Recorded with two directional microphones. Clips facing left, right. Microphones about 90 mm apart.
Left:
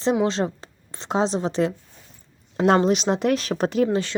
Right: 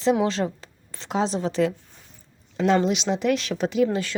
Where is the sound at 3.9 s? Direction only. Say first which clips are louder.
Left 3 dB; 30° left (ahead or behind).